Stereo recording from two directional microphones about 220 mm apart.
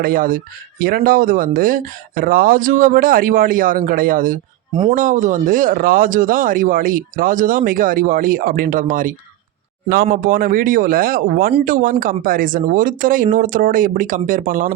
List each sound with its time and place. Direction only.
0.0 s speech: 40° right (ahead or behind)